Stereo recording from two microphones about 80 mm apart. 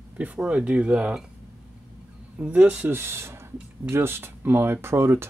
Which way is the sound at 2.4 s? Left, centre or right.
Centre.